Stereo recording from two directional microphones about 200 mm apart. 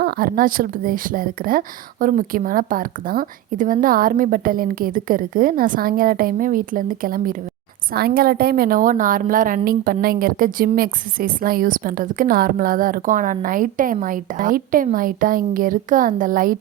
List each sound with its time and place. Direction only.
0.0 s speech: 45° right (ahead or behind)